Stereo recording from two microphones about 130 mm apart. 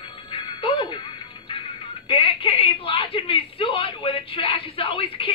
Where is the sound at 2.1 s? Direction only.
45° left (ahead or behind).